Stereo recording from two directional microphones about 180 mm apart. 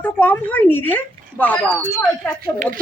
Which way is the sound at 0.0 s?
10° left (ahead or behind).